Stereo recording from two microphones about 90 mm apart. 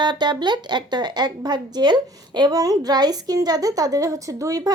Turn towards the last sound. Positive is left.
turn(degrees=-40)  # may be behind; listen again after turning